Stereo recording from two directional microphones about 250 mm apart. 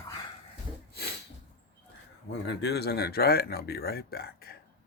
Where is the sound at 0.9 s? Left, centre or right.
Left.